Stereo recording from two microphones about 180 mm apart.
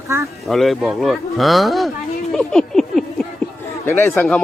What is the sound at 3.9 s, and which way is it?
Speech, 10° left (ahead or behind).